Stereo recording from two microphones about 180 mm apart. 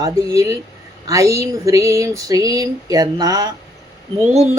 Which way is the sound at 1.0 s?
20° right (ahead or behind).